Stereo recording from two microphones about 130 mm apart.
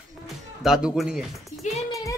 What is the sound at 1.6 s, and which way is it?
Speech, 65° left (ahead or behind).